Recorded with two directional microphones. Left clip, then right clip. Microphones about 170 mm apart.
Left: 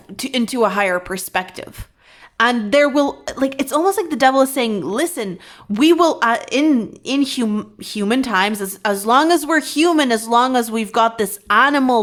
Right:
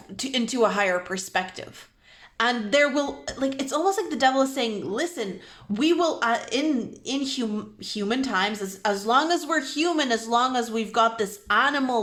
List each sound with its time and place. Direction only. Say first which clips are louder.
0.2 s speech: left 5 dB; 35° left (ahead or behind)